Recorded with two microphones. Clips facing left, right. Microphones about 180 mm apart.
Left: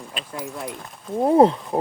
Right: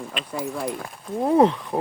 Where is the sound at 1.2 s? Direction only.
30° left (ahead or behind).